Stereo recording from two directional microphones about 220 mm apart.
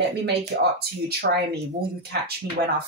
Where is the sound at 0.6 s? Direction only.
45° right (ahead or behind).